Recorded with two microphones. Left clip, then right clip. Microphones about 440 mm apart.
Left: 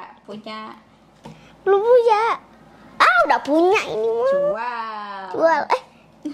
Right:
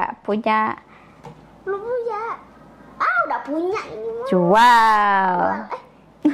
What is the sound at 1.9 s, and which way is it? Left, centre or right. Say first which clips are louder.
Speech: left 10 dB; left.